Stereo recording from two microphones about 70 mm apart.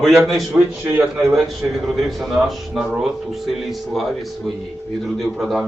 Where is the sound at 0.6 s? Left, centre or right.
Right.